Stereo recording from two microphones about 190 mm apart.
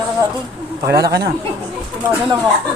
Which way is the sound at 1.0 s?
55° right (ahead or behind).